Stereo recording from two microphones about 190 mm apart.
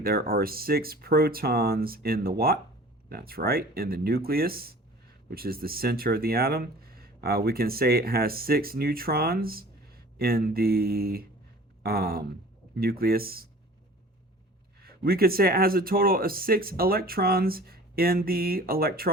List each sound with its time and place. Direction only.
0.0 s speech: 50° right (ahead or behind)
14.8 s speech: 50° right (ahead or behind)